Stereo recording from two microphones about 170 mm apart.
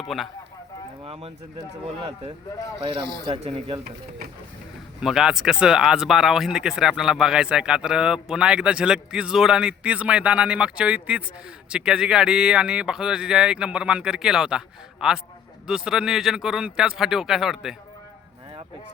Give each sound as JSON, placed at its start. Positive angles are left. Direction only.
{"t": 0.0, "sound": "speech", "side_deg": 0}
{"t": 1.0, "sound": "speech", "side_deg": -35}
{"t": 4.9, "sound": "speech", "side_deg": -5}